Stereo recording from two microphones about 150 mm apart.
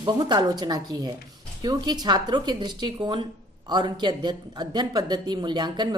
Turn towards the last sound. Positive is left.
turn(degrees=-30)  # may be behind; listen again after turning